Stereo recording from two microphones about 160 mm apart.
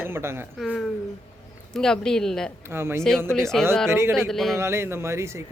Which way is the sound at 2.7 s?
15° right (ahead or behind).